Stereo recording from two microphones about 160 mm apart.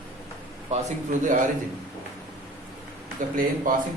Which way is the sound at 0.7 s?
50° right (ahead or behind).